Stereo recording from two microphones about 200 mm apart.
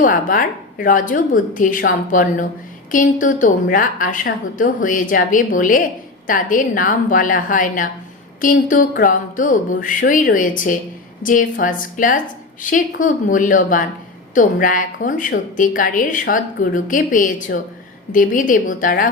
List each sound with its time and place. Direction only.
0.0 s a woman's voice: 45° left (ahead or behind)